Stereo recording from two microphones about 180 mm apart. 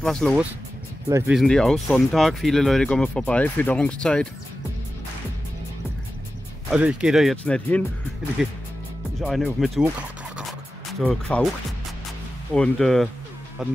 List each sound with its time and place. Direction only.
0.0 s speech: 5° left (ahead or behind)
1.0 s speech: 15° right (ahead or behind)
1.3 s speech: centre (ahead or behind)
6.7 s speech: 5° right (ahead or behind)
10.9 s speech: centre (ahead or behind)
12.5 s speech: 5° left (ahead or behind)